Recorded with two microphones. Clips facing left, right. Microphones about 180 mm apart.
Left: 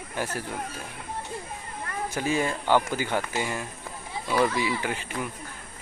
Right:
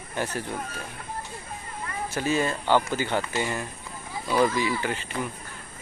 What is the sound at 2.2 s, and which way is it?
Speech, 15° left (ahead or behind).